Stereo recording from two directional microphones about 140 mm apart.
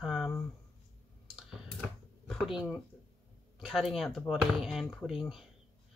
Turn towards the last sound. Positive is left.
turn(degrees=0)  # may be behind; listen again after turning